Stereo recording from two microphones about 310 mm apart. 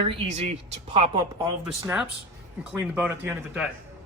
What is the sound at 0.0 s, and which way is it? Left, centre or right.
Speech, right.